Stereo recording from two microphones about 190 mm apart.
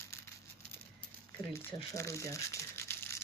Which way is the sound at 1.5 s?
15° left (ahead or behind).